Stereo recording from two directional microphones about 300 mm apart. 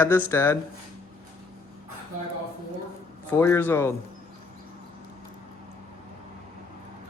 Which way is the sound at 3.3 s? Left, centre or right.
Centre.